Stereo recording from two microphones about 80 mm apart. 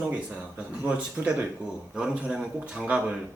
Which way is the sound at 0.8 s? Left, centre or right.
Centre.